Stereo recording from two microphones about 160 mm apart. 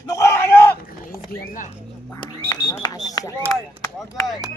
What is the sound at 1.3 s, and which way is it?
Speech, 55° left (ahead or behind).